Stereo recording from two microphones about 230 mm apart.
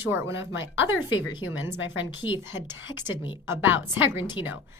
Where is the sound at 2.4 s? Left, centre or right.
Centre.